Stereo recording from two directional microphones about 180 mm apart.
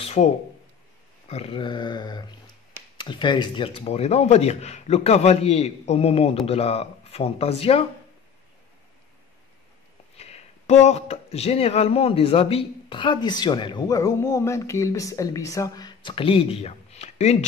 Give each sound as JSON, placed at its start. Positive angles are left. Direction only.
{"t": 0.0, "sound": "a sound", "side_deg": 35}
{"t": 1.3, "sound": "speech", "side_deg": 30}
{"t": 10.1, "sound": "speech", "side_deg": 35}